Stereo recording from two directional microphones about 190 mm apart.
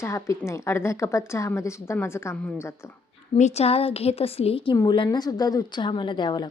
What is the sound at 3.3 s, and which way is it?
A woman's voice, 35° left (ahead or behind).